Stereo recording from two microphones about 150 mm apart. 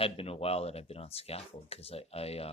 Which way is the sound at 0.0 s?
40° left (ahead or behind).